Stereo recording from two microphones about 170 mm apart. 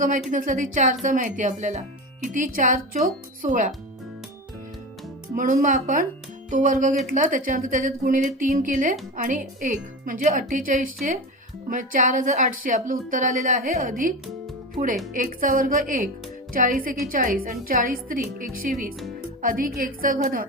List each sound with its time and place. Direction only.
0.3 s a woman's voice: 50° right (ahead or behind)
5.3 s a woman's voice: 55° right (ahead or behind)
15.1 s a woman's voice: 50° right (ahead or behind)